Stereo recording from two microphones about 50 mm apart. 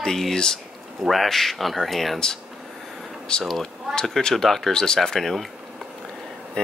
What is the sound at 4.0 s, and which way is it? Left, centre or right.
Speech, centre.